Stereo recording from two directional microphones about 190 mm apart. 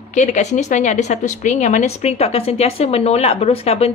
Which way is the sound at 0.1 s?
40° left (ahead or behind).